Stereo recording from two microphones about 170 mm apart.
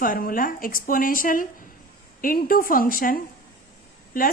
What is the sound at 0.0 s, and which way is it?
A woman's voice, 55° left (ahead or behind).